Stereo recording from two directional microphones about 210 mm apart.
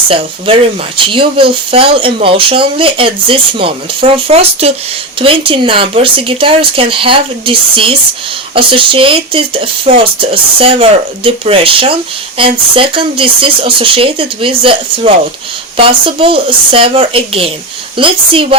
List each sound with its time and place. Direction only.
0.1 s speech: 25° right (ahead or behind)